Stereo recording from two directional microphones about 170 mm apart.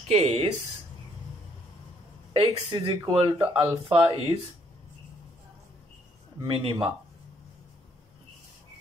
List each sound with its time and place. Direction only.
0.1 s speech: 40° right (ahead or behind)
2.3 s speech: 30° right (ahead or behind)
6.4 s speech: 30° right (ahead or behind)